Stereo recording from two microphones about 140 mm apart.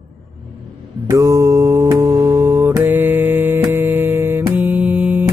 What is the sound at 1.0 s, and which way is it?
Mantra, 25° right (ahead or behind).